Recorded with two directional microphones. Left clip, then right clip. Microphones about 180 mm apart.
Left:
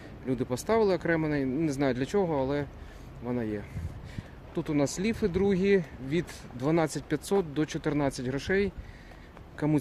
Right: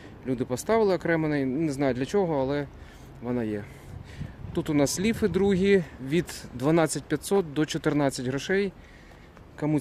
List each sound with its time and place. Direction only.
0.3 s speech: 20° right (ahead or behind)
9.6 s speech: 5° right (ahead or behind)